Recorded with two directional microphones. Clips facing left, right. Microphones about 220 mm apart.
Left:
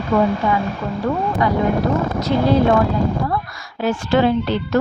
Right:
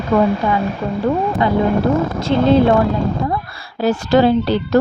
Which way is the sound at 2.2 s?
25° right (ahead or behind).